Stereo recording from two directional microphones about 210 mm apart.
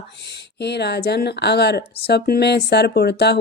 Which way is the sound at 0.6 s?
50° left (ahead or behind).